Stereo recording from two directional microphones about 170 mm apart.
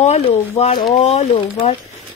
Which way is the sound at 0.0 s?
40° left (ahead or behind).